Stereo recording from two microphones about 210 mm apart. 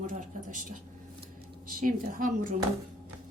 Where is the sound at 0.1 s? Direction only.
40° right (ahead or behind).